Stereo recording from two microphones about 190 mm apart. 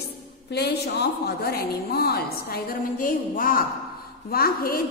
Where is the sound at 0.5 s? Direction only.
60° left (ahead or behind).